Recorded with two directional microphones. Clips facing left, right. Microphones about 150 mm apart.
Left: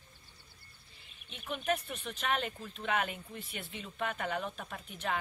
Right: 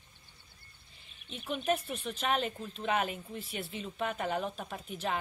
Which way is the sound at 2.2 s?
30° right (ahead or behind).